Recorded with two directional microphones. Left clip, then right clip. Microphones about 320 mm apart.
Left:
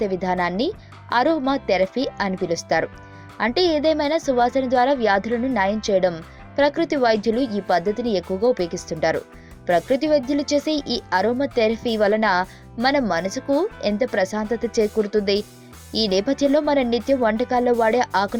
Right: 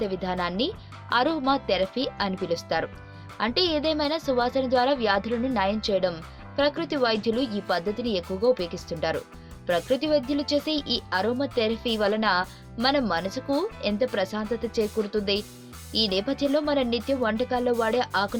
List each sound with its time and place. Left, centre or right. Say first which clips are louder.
0.0 s speech: left 6 dB; centre